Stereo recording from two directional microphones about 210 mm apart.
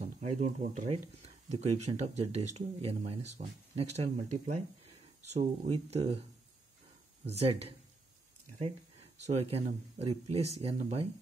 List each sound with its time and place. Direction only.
0.0 s speech: 30° right (ahead or behind)
7.2 s speech: 30° right (ahead or behind)
9.2 s speech: 30° right (ahead or behind)